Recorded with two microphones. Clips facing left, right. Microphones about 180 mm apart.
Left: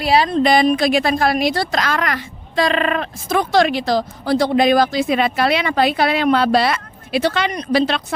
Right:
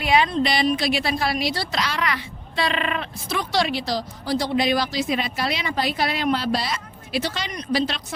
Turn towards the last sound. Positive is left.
turn(degrees=60)  # may be behind; listen again after turning